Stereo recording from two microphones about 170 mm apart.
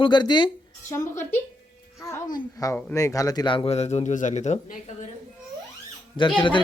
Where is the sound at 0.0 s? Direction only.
25° left (ahead or behind).